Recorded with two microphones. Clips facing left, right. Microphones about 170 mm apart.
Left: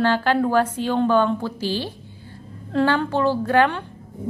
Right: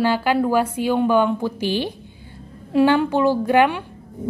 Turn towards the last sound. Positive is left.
turn(degrees=-10)  # may be behind; listen again after turning